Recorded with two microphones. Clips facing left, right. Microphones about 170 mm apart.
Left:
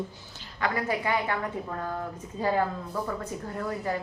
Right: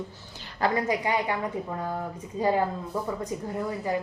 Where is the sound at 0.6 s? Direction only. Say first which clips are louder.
Right 3 dB; 20° right (ahead or behind).